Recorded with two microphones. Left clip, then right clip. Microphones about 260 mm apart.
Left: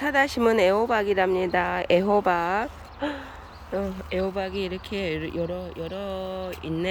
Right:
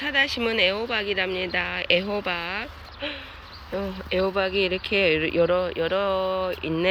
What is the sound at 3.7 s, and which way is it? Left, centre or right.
Speech, centre.